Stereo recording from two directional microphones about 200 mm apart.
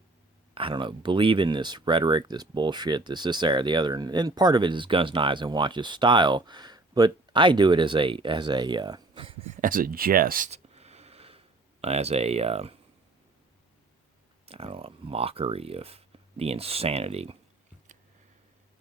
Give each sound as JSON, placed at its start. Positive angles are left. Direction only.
{"t": 0.5, "sound": "speech", "side_deg": -25}
{"t": 14.4, "sound": "speech", "side_deg": -30}